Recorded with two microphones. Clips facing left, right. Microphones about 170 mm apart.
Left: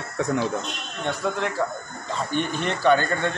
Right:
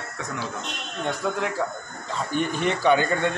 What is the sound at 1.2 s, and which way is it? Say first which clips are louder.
Speech: left 2 dB; 5° right (ahead or behind).